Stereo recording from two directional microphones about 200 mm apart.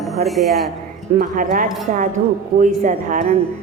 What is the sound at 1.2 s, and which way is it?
A woman's voice, 40° right (ahead or behind).